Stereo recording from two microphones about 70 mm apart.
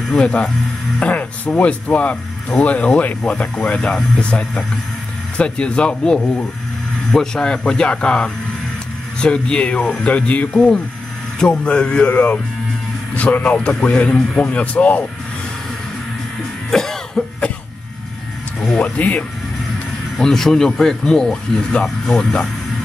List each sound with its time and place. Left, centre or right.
0.1 s speech: centre
16.7 s cough: centre
18.6 s speech: centre
18.9 s speech: left
20.2 s speech: centre